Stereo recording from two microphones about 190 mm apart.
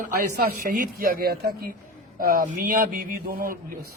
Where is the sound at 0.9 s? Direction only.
50° right (ahead or behind).